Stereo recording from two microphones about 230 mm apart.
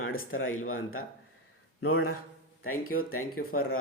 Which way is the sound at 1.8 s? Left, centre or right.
Left.